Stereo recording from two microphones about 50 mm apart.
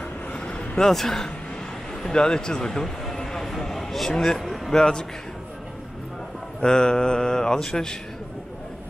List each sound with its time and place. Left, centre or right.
0.3 s a sound: centre
4.7 s speech: centre
6.6 s speech: centre